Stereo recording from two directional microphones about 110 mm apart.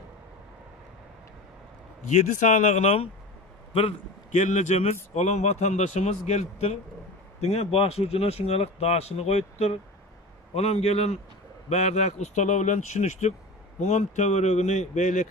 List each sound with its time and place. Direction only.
2.1 s speech: 90° left
7.3 s speech: 75° left (ahead or behind)
10.5 s speech: 70° left (ahead or behind)
11.7 s speech: 90° left